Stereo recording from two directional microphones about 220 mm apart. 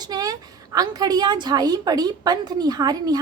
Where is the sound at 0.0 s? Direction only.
15° right (ahead or behind).